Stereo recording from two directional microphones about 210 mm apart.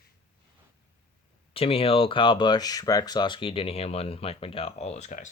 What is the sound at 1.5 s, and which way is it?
Speech, 25° left (ahead or behind).